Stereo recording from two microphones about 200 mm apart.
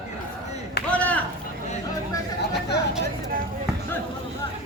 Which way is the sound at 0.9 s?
5° left (ahead or behind).